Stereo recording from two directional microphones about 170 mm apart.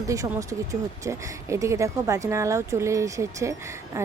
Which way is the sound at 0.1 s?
20° right (ahead or behind).